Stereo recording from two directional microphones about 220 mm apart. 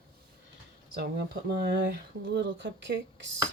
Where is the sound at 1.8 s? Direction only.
50° right (ahead or behind).